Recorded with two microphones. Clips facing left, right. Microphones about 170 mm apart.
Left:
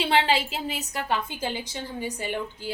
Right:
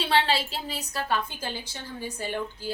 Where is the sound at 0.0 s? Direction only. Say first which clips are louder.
Left 2 dB; 20° left (ahead or behind).